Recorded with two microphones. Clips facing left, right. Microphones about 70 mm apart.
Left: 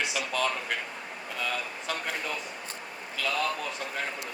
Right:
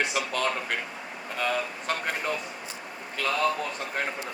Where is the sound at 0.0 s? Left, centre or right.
Right.